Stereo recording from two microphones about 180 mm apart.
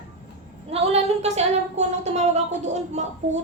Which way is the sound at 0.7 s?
35° right (ahead or behind).